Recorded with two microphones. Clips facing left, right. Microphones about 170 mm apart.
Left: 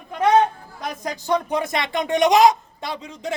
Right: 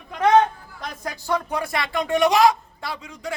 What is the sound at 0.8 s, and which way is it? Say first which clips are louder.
Speech: left 4 dB; 15° left (ahead or behind).